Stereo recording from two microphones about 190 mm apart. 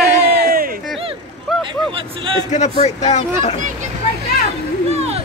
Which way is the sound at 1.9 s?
30° right (ahead or behind).